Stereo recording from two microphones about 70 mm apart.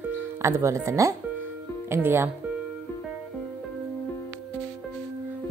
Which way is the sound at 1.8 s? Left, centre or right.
Right.